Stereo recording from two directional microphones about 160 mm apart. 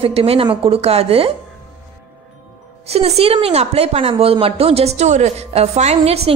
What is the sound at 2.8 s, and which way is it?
A woman's voice, 40° right (ahead or behind).